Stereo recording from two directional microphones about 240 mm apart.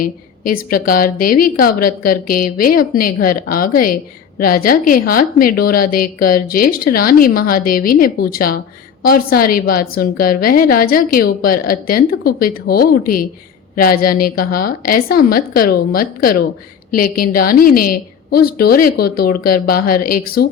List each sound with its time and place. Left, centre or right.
0.0 s a woman's voice: left